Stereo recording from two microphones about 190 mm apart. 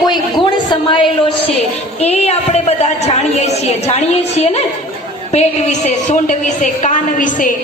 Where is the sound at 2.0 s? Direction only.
35° left (ahead or behind).